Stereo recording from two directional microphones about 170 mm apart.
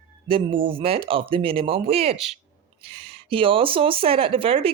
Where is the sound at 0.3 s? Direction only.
30° right (ahead or behind).